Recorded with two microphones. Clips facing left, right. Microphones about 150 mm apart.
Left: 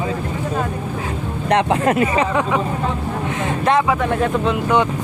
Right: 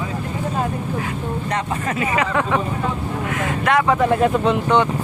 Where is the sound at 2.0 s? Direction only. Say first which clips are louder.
Left 3 dB; 30° left (ahead or behind).